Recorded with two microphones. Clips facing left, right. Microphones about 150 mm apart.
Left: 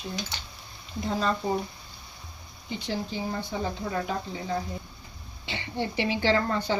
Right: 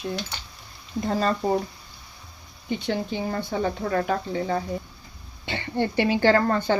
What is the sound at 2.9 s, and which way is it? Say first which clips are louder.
Speech: right 3 dB; 60° right (ahead or behind).